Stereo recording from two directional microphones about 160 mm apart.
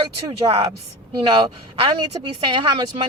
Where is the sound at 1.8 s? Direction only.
30° right (ahead or behind).